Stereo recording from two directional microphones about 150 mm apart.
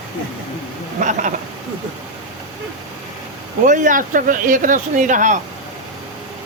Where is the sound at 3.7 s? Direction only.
60° right (ahead or behind).